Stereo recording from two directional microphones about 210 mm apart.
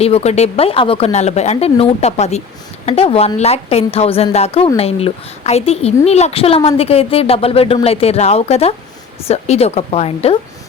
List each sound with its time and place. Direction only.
0.0 s a woman's voice: 30° left (ahead or behind)